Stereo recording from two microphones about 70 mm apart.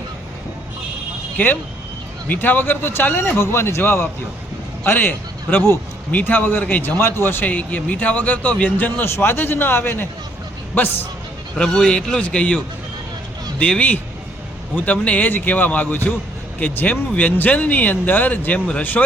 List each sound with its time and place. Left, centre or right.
1.4 s a man's voice: left
7.4 s speech: left
9.0 s a man's voice: left
11.5 s a man's voice: centre; by 19.0 s left